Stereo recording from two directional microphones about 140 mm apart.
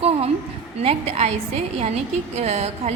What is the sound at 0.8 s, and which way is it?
Speech, 45° right (ahead or behind).